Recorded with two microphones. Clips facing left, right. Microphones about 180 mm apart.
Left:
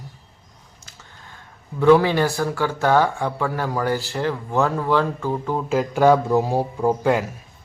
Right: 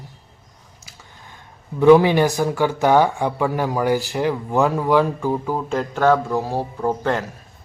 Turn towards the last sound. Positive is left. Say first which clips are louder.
# left 2 dB
turn(degrees=10)  # may be behind; listen again after turning